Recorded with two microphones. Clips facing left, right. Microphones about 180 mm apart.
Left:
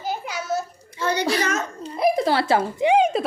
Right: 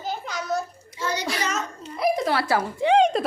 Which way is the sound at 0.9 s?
60° left (ahead or behind).